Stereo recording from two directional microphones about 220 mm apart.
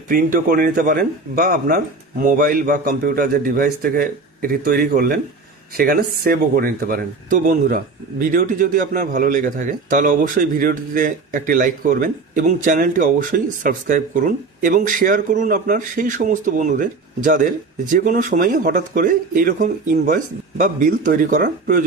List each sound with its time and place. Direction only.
0.1 s speech: 40° right (ahead or behind)